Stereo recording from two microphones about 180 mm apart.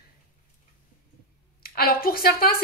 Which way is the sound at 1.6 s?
55° left (ahead or behind).